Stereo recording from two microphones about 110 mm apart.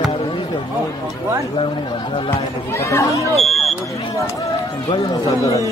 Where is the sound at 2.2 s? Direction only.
25° left (ahead or behind).